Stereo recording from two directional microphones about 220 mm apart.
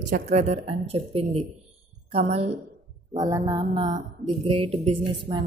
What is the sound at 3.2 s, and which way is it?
Mantra, 15° right (ahead or behind).